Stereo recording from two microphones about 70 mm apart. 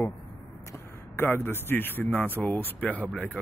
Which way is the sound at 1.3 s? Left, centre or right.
Left.